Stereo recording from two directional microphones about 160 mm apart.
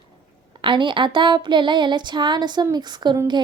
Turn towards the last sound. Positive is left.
turn(degrees=-30)  # may be behind; listen again after turning